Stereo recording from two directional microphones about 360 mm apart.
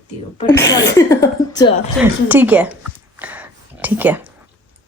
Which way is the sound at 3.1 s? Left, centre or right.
Centre.